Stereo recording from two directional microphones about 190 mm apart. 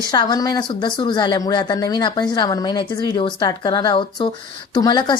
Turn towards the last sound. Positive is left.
turn(degrees=20)  # may be behind; listen again after turning